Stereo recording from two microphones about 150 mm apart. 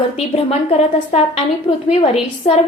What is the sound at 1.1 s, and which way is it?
A woman's voice, 40° left (ahead or behind).